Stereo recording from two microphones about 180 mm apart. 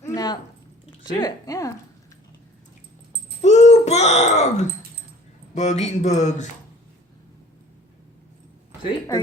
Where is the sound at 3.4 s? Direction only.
40° left (ahead or behind).